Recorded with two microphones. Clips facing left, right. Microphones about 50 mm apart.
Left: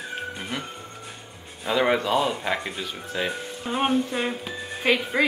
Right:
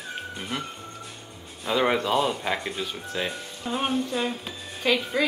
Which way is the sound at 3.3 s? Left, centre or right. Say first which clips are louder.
Left 2 dB; left.